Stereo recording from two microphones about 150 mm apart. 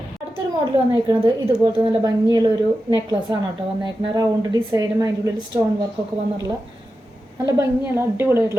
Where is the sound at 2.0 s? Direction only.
25° right (ahead or behind).